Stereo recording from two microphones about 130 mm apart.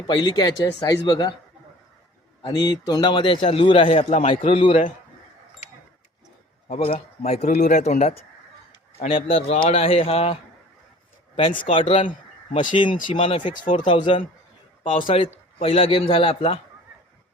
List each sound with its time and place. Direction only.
0.1 s a man's voice: 35° left (ahead or behind)
2.5 s a man's voice: 30° left (ahead or behind)
6.7 s a man's voice: 45° left (ahead or behind)
9.0 s a man's voice: 45° left (ahead or behind)
11.7 s a man's voice: 45° left (ahead or behind)